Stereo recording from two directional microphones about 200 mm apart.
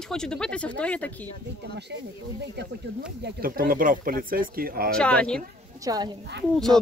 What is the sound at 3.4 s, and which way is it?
Speech, 45° right (ahead or behind).